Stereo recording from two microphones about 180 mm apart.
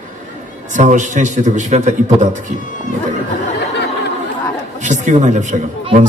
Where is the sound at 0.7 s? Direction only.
45° right (ahead or behind).